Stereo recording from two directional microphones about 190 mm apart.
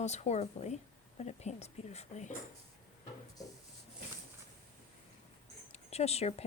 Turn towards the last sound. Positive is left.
turn(degrees=35)  # may be behind; listen again after turning